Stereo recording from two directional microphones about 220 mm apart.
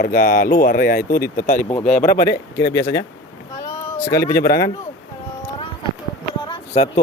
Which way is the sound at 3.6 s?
15° left (ahead or behind).